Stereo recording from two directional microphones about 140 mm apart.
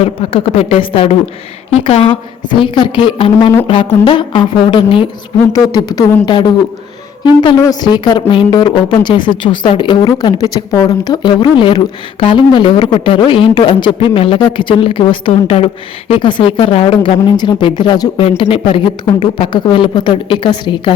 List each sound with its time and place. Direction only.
0.0 s a man's voice: 40° left (ahead or behind)
5.5 s a man's voice: 25° left (ahead or behind)
18.2 s a man's voice: 45° left (ahead or behind)